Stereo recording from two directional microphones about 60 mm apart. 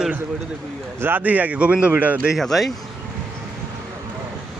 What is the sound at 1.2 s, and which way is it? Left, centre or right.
Speech, right.